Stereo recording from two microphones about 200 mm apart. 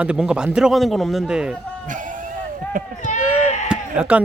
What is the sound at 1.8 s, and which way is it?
Sheep, 40° right (ahead or behind).